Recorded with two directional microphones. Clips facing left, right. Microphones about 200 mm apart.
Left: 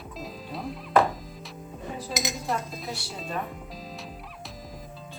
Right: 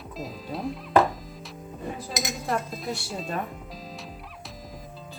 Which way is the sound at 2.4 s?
Centre (ahead or behind).